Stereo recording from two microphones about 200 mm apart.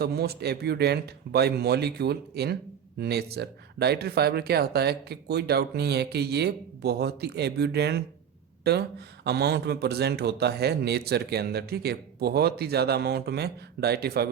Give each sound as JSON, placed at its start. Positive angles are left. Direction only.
{"t": 0.0, "sound": "a man's voice", "side_deg": -50}